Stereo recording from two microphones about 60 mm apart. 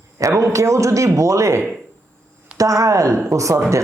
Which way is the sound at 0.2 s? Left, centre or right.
Right.